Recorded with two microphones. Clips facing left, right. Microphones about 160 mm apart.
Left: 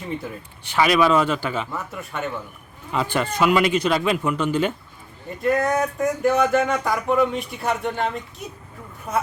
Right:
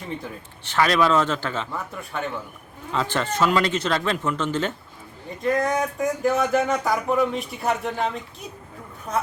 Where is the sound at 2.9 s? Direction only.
10° left (ahead or behind).